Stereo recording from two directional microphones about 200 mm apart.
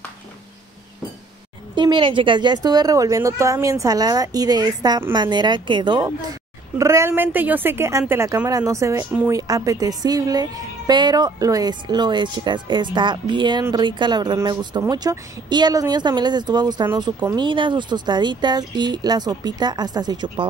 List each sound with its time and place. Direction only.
1.8 s a woman's voice: 25° right (ahead or behind)